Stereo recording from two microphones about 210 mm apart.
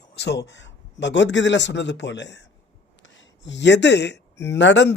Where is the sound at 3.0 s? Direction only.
60° left (ahead or behind).